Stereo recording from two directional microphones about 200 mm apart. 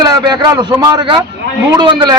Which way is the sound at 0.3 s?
20° right (ahead or behind).